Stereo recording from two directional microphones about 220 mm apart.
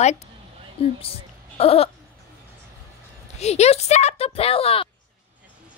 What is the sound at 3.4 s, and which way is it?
Speech, 30° left (ahead or behind).